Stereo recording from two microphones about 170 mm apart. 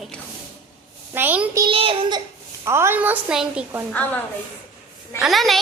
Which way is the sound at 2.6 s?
15° right (ahead or behind).